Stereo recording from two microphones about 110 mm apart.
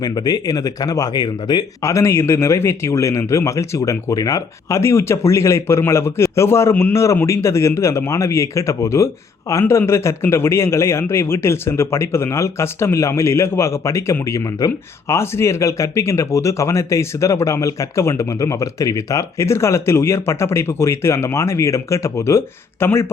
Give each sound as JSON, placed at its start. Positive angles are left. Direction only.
{"t": 0.0, "sound": "speech", "side_deg": 40}
{"t": 1.8, "sound": "a man's voice", "side_deg": 25}